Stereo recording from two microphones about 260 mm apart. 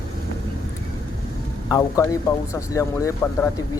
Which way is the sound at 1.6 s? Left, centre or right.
Centre.